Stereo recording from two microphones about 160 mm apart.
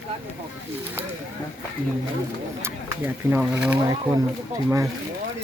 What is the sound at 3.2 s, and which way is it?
Speech, 10° right (ahead or behind).